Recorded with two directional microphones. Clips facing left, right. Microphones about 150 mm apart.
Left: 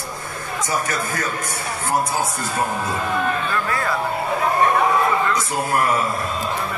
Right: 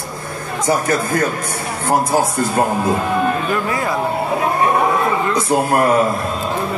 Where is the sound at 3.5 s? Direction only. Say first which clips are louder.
Right 4 dB; 15° right (ahead or behind).